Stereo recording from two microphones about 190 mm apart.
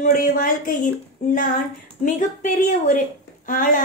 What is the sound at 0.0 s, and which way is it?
Speech, 45° left (ahead or behind).